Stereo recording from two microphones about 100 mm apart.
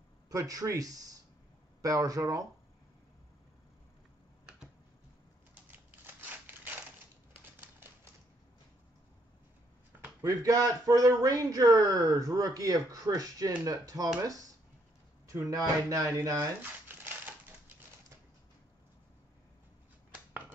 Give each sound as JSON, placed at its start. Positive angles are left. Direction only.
{"t": 0.3, "sound": "speech", "side_deg": -35}
{"t": 5.7, "sound": "scissors", "side_deg": -15}
{"t": 7.3, "sound": "typewriter", "side_deg": -20}
{"t": 10.2, "sound": "speech", "side_deg": -35}
{"t": 15.2, "sound": "speech", "side_deg": -35}
{"t": 16.3, "sound": "a sound", "side_deg": -20}